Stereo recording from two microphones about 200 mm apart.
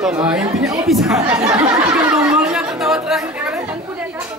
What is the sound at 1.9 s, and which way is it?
Chatter, 5° right (ahead or behind).